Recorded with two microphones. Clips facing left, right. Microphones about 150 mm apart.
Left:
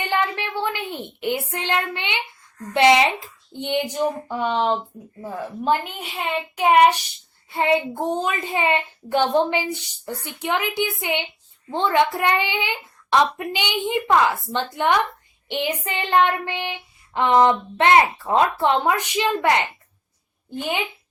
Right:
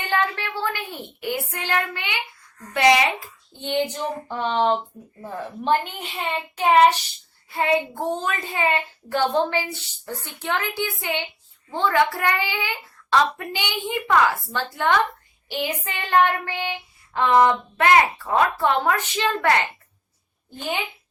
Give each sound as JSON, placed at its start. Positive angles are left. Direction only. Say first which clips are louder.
{"t": 0.1, "sound": "a child's voice", "louder": "right 1 dB", "side_deg": 15}
{"t": 7.5, "sound": "a woman's voice", "louder": "left 2 dB", "side_deg": 25}